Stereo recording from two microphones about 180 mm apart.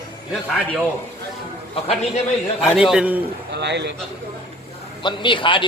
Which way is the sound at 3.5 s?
70° right (ahead or behind).